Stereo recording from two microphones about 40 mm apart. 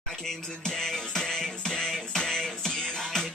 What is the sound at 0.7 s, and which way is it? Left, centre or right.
Music, centre.